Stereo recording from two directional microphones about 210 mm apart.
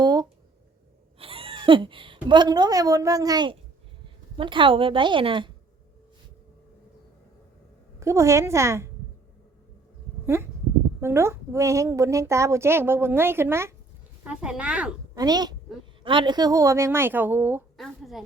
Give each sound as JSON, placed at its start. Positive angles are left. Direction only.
{"t": 0.0, "sound": "a sound", "side_deg": -20}
{"t": 1.2, "sound": "a woman's voice", "side_deg": -25}
{"t": 7.9, "sound": "a woman's voice", "side_deg": -15}
{"t": 11.0, "sound": "a woman's voice", "side_deg": -15}
{"t": 15.1, "sound": "a woman's voice", "side_deg": -20}
{"t": 17.7, "sound": "a woman's voice", "side_deg": 0}